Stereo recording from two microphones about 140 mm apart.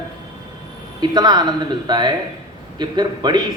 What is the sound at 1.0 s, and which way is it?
A man's voice, 30° right (ahead or behind).